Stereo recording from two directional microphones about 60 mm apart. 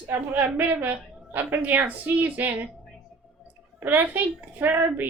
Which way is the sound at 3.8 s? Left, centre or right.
Right.